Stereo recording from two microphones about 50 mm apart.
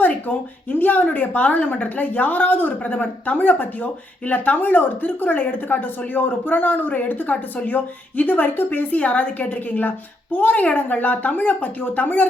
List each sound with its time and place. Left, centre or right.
0.0 s a woman's voice: left